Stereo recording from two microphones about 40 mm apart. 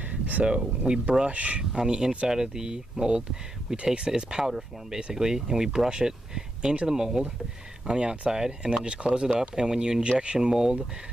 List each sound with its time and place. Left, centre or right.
0.1 s a sound: right
0.8 s speech: right
1.6 s speech: right